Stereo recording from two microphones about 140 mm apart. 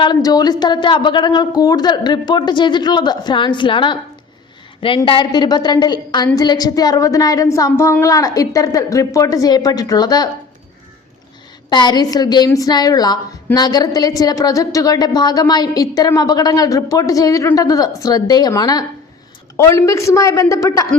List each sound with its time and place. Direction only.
0.0 s a woman's voice: 30° left (ahead or behind)
5.0 s a woman's voice: 35° left (ahead or behind)
11.7 s a woman's voice: 30° left (ahead or behind)